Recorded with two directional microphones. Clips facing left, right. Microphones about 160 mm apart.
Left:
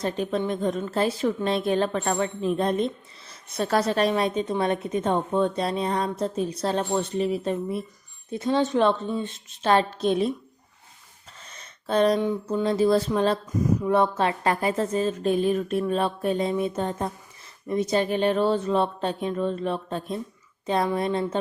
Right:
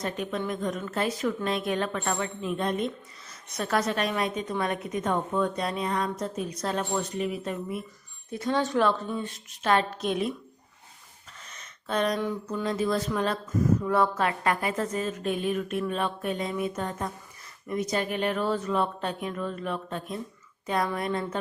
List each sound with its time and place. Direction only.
0.0 s a woman's voice: 30° left (ahead or behind)
11.4 s a sound: 30° left (ahead or behind)
12.2 s a woman's voice: 25° left (ahead or behind)